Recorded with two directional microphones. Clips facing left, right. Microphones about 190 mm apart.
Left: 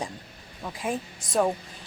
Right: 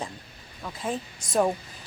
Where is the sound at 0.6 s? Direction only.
10° left (ahead or behind).